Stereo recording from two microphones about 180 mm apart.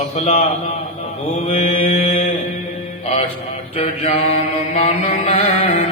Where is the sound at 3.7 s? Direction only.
35° left (ahead or behind).